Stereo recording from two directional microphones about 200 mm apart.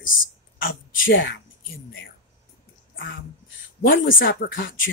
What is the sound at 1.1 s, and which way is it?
Speech, 70° left (ahead or behind).